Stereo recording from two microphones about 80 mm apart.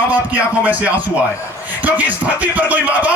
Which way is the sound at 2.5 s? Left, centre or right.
Right.